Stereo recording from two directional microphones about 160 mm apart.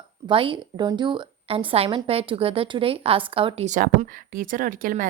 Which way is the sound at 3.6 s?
50° right (ahead or behind).